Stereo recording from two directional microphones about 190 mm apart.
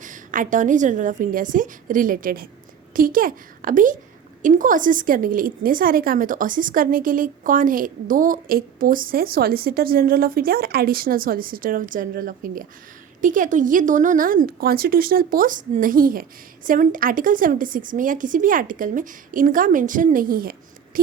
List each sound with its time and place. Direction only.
0.0 s a woman's voice: 45° right (ahead or behind)